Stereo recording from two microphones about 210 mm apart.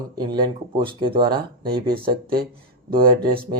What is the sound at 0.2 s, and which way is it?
Speech, 20° right (ahead or behind).